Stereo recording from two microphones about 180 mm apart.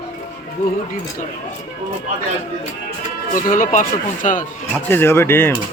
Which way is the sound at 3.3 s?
45° left (ahead or behind).